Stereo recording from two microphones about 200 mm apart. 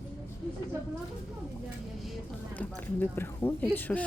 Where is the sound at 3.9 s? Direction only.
10° left (ahead or behind).